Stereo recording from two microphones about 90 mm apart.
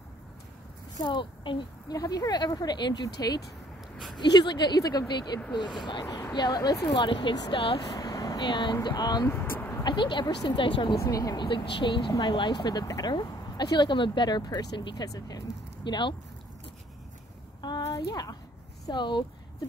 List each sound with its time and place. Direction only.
1.0 s speech: 65° left (ahead or behind)
1.9 s speech: 45° left (ahead or behind); by 7.3 s 65° left (ahead or behind)
7.5 s speech: 85° left
7.9 s vehicle: 45° left (ahead or behind)
8.8 s speech: 50° left (ahead or behind)
9.3 s vehicle: 25° left (ahead or behind)
9.8 s speech: 60° left (ahead or behind)
10.2 s speech: 50° left (ahead or behind)
10.6 s speech: 65° left (ahead or behind)
11.0 s speech: 40° left (ahead or behind)
11.4 s speech: 65° left (ahead or behind)
17.6 s a sound: 50° left (ahead or behind)
18.9 s speech: 60° left (ahead or behind)